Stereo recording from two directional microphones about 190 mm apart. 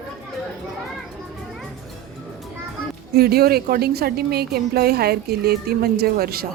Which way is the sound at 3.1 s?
55° right (ahead or behind).